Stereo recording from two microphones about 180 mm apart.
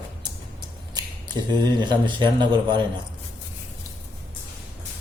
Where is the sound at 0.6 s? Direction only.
25° right (ahead or behind).